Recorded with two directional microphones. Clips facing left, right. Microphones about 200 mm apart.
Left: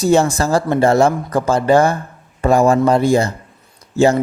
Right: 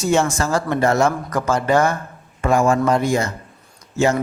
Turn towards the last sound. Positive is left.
turn(degrees=35)  # may be behind; listen again after turning